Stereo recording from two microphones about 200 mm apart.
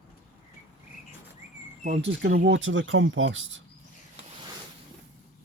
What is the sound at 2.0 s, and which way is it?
Speech, 60° right (ahead or behind).